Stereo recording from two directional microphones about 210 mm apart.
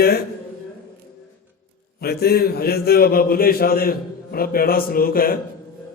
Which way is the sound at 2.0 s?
50° left (ahead or behind).